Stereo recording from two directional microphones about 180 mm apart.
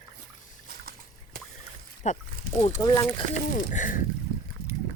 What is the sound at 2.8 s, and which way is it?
Speech, 20° left (ahead or behind).